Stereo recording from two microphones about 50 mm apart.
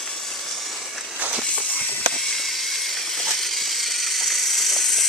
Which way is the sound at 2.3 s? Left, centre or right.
Centre.